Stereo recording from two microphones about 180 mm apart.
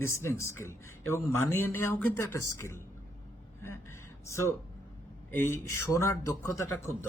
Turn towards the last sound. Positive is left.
turn(degrees=15)  # may be behind; listen again after turning